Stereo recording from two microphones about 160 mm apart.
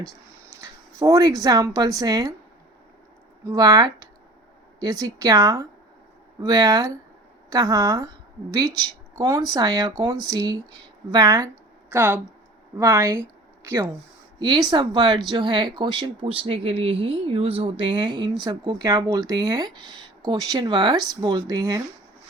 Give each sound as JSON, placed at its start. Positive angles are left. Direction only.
{"t": 0.6, "sound": "a sound", "side_deg": -20}
{"t": 1.4, "sound": "speech", "side_deg": -20}
{"t": 3.4, "sound": "a woman's voice", "side_deg": -25}
{"t": 11.9, "sound": "speech", "side_deg": -15}
{"t": 14.3, "sound": "speech", "side_deg": -30}